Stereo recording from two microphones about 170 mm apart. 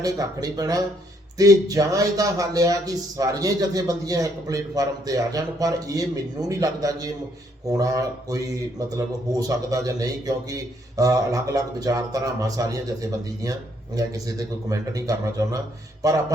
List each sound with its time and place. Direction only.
0.0 s a man's voice: 20° right (ahead or behind)